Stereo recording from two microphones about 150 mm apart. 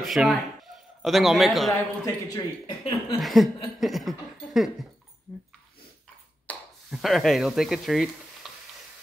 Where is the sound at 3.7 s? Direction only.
Centre (ahead or behind).